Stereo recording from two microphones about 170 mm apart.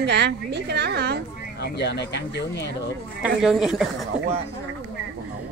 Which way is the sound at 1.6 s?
80° left.